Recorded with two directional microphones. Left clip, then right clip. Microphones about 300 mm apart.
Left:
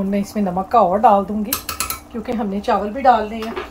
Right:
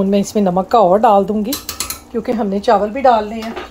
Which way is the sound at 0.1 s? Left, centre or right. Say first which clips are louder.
Right 7 dB; right.